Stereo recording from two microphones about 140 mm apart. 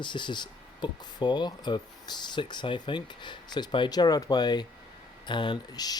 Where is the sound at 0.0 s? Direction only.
35° left (ahead or behind).